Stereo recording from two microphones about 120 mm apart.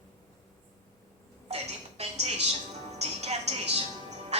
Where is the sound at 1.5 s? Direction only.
60° right (ahead or behind).